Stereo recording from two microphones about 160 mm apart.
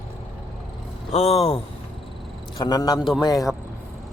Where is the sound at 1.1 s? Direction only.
40° left (ahead or behind).